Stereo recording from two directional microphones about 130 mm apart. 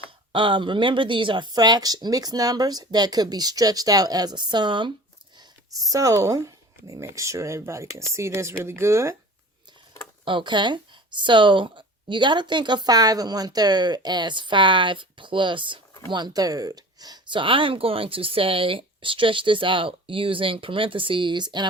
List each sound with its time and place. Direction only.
0.3 s speech: 40° right (ahead or behind); by 9.1 s 20° right (ahead or behind)
10.2 s speech: 40° right (ahead or behind)